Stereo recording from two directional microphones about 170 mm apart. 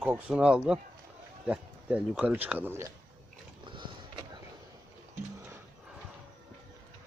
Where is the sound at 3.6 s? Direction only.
30° right (ahead or behind).